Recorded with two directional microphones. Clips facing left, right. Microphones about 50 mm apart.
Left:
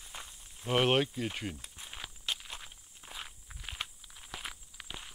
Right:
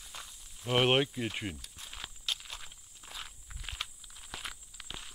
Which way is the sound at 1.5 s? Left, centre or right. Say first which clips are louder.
Even; left.